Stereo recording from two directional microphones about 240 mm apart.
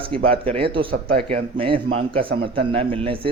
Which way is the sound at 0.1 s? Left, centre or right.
Right.